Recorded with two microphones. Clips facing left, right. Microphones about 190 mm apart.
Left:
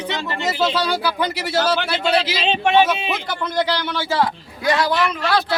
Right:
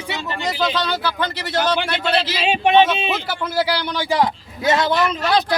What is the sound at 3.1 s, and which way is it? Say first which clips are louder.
A man's voice: right 1 dB; 5° right (ahead or behind).